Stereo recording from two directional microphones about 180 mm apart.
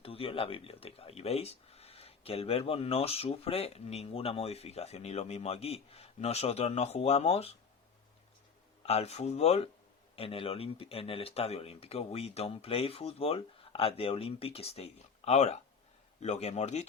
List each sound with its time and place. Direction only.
0.0 s speech: 30° left (ahead or behind)
8.8 s speech: 35° left (ahead or behind)